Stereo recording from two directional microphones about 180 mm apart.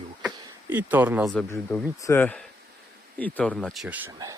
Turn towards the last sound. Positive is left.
turn(degrees=-10)  # may be behind; listen again after turning